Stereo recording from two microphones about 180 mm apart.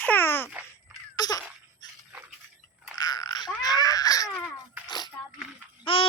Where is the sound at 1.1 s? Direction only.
20° left (ahead or behind).